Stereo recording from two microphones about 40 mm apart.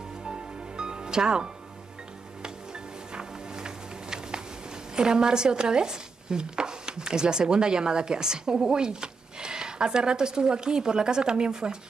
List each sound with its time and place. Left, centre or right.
0.2 s music: right
3.2 s music: centre
4.9 s speech: centre